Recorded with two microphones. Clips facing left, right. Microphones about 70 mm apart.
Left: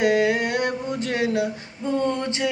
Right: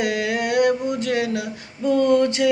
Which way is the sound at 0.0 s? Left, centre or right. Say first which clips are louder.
Left 3 dB; left.